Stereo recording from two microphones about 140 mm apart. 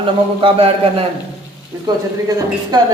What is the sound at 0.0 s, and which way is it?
A man's voice, 40° right (ahead or behind).